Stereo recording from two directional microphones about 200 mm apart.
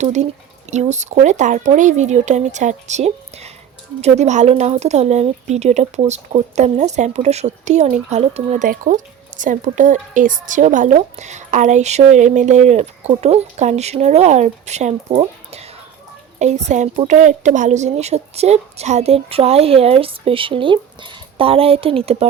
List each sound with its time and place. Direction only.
0.0 s speech: 35° right (ahead or behind)